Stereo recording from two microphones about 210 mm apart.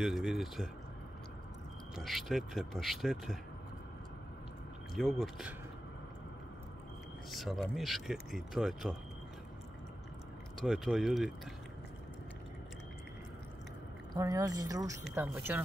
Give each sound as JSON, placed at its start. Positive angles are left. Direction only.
{"t": 0.0, "sound": "speech", "side_deg": 0}
{"t": 2.0, "sound": "speech", "side_deg": 0}
{"t": 4.9, "sound": "speech", "side_deg": 0}
{"t": 7.3, "sound": "speech", "side_deg": 0}
{"t": 10.6, "sound": "speech", "side_deg": 0}
{"t": 14.1, "sound": "speech", "side_deg": -15}